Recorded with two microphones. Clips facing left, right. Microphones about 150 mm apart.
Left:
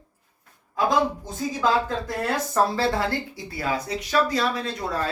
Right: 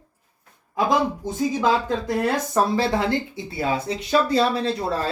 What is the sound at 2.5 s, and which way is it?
Speech, 20° right (ahead or behind).